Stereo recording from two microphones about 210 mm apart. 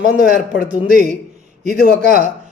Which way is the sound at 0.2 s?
50° left (ahead or behind).